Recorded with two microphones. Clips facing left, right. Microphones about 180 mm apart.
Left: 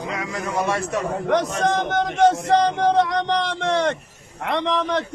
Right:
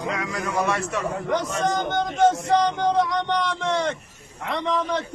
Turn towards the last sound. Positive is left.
turn(degrees=75)  # may be behind; listen again after turning